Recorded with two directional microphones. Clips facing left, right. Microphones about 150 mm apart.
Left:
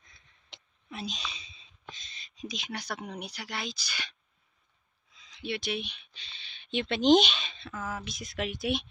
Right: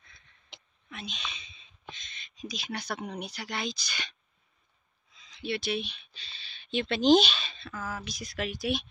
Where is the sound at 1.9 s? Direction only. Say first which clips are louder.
Right 1 dB; 35° left (ahead or behind).